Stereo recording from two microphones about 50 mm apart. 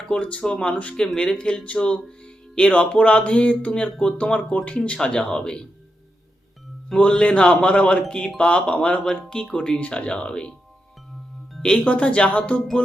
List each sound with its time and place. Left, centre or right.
0.1 s speech: left
0.9 s speech: centre
5.0 s speech: centre
7.0 s speech: left
11.9 s speech: left